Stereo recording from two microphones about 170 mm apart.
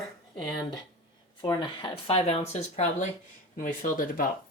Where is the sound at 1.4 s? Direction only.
25° left (ahead or behind).